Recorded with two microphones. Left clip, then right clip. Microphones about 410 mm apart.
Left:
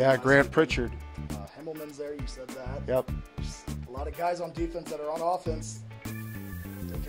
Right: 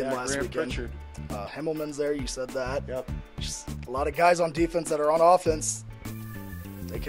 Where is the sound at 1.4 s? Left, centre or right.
Right.